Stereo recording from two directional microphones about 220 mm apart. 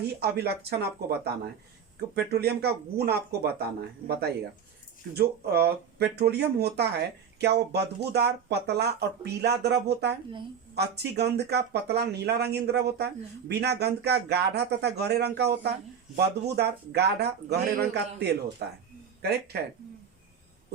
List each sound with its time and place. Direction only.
0.0 s speech: 45° right (ahead or behind)